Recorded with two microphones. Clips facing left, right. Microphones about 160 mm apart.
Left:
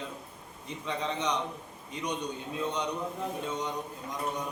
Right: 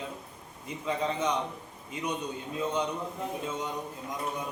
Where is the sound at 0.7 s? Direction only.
5° right (ahead or behind).